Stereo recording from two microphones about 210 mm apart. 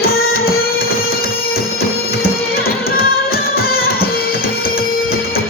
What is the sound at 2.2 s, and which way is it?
Music, 45° left (ahead or behind).